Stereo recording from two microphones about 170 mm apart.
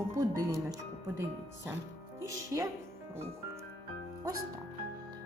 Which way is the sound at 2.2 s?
20° right (ahead or behind).